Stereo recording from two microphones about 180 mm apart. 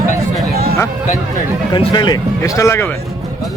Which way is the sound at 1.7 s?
25° left (ahead or behind).